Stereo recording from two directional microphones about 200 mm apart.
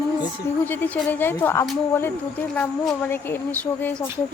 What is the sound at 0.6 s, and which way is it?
A woman's voice, 10° left (ahead or behind).